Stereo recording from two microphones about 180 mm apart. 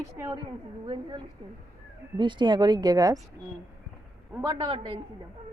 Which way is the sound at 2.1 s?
25° right (ahead or behind).